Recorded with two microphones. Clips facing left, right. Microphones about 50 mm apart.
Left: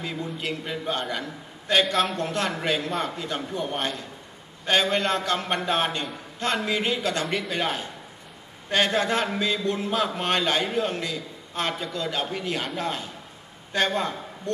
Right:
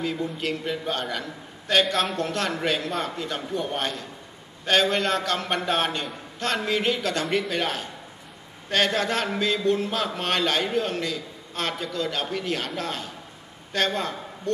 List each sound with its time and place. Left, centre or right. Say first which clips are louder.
0.0 s a man's voice: right 3 dB; centre
6.9 s a man's voice: right 1 dB; centre
7.2 s a man's voice: right 2 dB; centre
7.5 s a man's voice: even; centre